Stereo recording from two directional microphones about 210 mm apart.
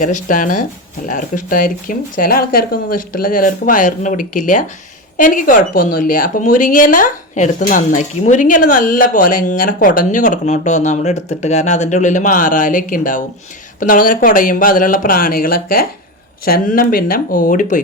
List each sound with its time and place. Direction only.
0.0 s speech: 40° left (ahead or behind)